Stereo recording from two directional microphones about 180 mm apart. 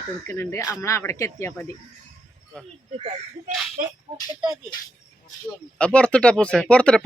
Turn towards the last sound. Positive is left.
turn(degrees=5)  # may be behind; listen again after turning